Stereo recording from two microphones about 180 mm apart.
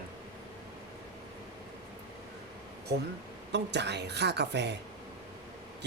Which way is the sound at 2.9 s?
65° right (ahead or behind).